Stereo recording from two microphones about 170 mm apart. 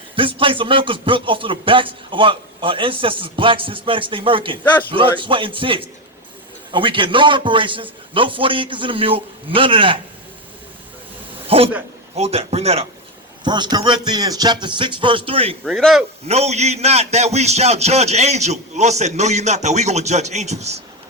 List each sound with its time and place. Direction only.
0.2 s a man's voice: 30° right (ahead or behind)
11.4 s a sound: 35° right (ahead or behind)
12.1 s a man's voice: 35° right (ahead or behind)
13.4 s a man's voice: 25° right (ahead or behind)
15.6 s speech: centre (ahead or behind)
16.2 s a man's voice: 40° right (ahead or behind)